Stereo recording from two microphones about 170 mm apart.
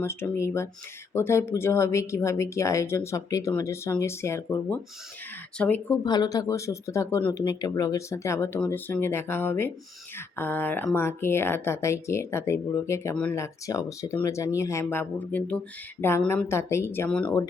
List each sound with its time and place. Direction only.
0.0 s speech: 15° left (ahead or behind)
6.1 s speech: 20° left (ahead or behind); by 17.3 s 5° left (ahead or behind)